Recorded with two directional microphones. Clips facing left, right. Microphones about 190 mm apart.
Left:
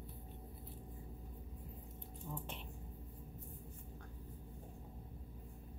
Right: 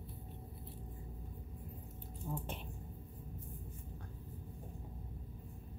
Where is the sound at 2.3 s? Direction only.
40° right (ahead or behind).